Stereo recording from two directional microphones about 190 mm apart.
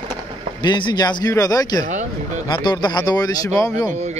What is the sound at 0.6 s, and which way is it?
Speech, 25° left (ahead or behind).